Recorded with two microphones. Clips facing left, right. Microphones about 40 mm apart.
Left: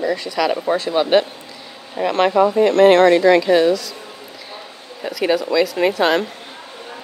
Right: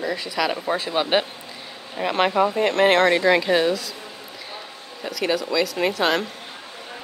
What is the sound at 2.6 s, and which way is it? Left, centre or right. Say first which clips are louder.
Speech: left 8 dB; right.